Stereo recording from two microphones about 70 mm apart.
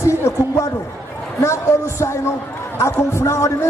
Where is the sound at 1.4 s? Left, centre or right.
Left.